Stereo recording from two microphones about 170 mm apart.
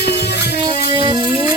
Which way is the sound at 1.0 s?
25° right (ahead or behind).